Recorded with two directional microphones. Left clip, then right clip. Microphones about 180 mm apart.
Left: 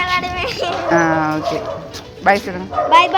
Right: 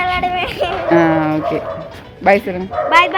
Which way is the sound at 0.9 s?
20° right (ahead or behind).